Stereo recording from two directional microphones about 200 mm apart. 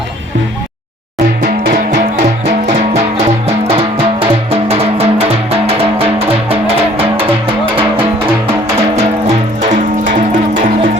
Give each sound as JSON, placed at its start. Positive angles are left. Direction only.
{"t": 1.5, "sound": "music", "side_deg": -55}
{"t": 3.8, "sound": "music", "side_deg": -30}
{"t": 9.0, "sound": "music", "side_deg": -35}